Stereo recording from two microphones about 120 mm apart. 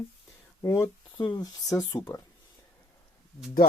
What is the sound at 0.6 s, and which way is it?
Speech, 30° left (ahead or behind).